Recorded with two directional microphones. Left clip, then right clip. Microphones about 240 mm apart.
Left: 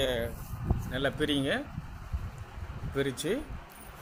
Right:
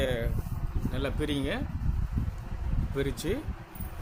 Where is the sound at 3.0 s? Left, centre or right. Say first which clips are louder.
Left 1 dB; centre.